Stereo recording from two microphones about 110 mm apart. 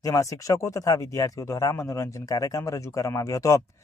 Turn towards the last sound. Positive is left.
turn(degrees=30)  # may be behind; listen again after turning